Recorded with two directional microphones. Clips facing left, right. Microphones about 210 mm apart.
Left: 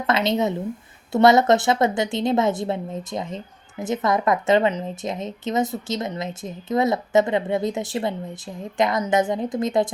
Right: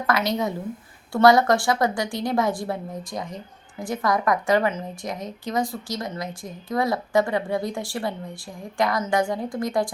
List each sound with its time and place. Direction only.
0.1 s a woman's voice: 25° left (ahead or behind)